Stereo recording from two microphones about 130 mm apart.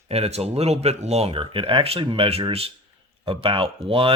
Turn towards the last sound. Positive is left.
turn(degrees=-45)  # may be behind; listen again after turning